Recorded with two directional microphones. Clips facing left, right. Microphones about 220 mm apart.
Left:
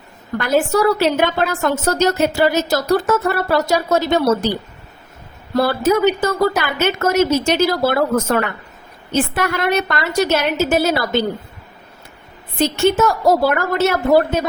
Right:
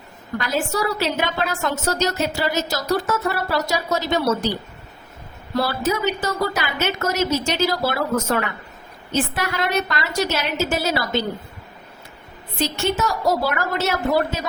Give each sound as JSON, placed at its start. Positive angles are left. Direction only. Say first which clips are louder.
{"t": 0.3, "sound": "a woman's voice", "louder": "left 7 dB", "side_deg": 55}
{"t": 5.5, "sound": "a woman's voice", "louder": "left 6 dB", "side_deg": 55}
{"t": 12.5, "sound": "a woman's voice", "louder": "left 7 dB", "side_deg": 55}